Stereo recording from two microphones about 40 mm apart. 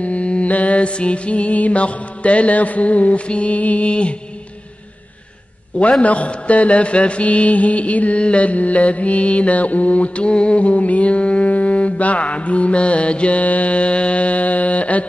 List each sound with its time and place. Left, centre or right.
0.0 s speech: left
5.8 s speech: left